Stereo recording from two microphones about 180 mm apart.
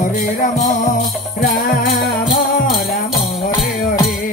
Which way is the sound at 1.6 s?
55° left (ahead or behind).